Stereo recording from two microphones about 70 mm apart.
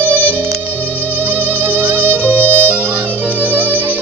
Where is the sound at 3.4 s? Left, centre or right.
Right.